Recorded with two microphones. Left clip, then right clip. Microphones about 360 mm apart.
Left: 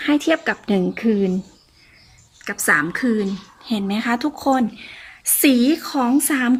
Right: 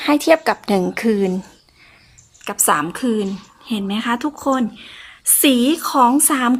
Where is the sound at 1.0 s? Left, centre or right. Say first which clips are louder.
Right 1 dB; right.